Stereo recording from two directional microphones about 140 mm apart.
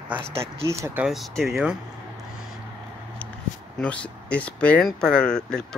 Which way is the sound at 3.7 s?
10° left (ahead or behind).